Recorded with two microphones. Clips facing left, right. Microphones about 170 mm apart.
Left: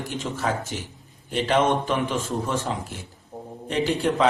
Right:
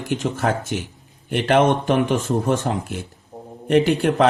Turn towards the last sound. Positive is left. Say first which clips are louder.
# right 5 dB
turn(degrees=-60)  # may be behind; listen again after turning